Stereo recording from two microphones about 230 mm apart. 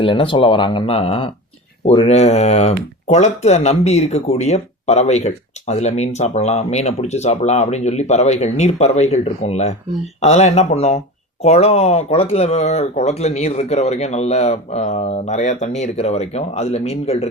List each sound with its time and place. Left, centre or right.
0.0 s speech: left